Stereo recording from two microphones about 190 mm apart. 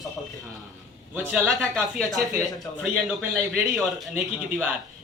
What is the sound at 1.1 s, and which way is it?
A man's voice, centre (ahead or behind).